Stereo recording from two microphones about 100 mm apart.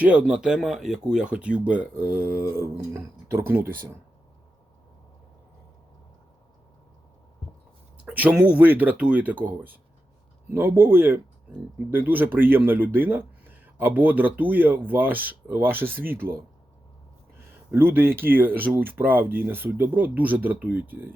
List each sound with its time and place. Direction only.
0.0 s speech: 15° right (ahead or behind)
8.0 s speech: 15° right (ahead or behind)
17.7 s speech: 20° right (ahead or behind)